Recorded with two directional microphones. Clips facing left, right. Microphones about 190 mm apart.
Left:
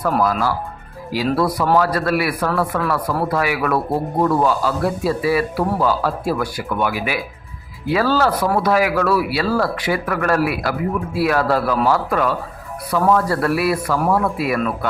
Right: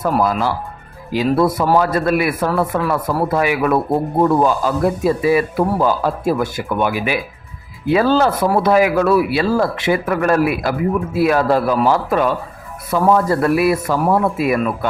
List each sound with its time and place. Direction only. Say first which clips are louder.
0.1 s speech: right 1 dB; 20° right (ahead or behind)